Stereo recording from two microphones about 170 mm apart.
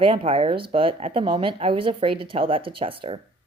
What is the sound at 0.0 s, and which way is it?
A woman's voice, 30° right (ahead or behind).